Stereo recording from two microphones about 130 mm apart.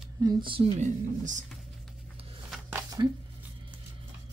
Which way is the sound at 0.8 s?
70° right (ahead or behind).